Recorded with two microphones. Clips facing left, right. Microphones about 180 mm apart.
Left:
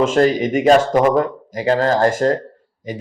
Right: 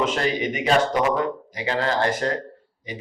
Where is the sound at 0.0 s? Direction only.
45° left (ahead or behind).